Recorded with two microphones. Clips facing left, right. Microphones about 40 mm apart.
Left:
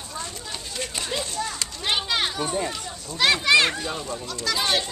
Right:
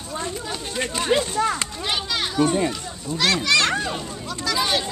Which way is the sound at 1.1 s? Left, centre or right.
Right.